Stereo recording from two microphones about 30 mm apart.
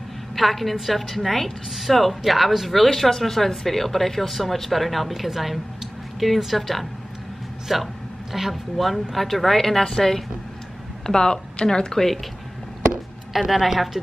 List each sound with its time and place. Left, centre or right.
0.4 s speech: centre
7.6 s a sound: centre
8.7 s a woman's voice: centre; by 12.1 s left
13.3 s a woman's voice: centre